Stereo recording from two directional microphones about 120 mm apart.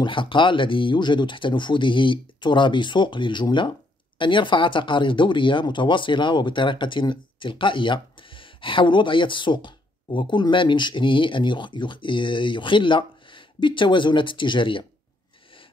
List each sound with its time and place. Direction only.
0.0 s speech: 45° left (ahead or behind)